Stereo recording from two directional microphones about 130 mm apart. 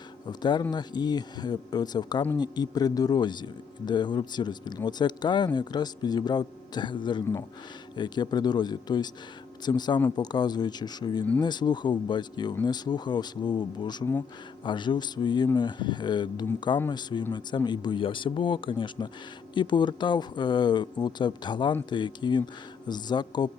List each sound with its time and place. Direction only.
0.3 s speech: 35° left (ahead or behind)